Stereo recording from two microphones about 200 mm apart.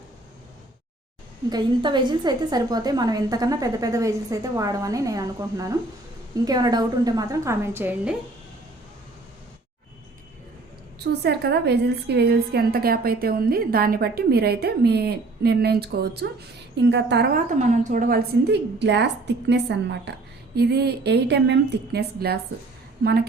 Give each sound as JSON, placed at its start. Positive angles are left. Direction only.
{"t": 1.5, "sound": "a woman's voice", "side_deg": -20}
{"t": 11.0, "sound": "a woman's voice", "side_deg": -55}
{"t": 17.6, "sound": "a woman's voice", "side_deg": -40}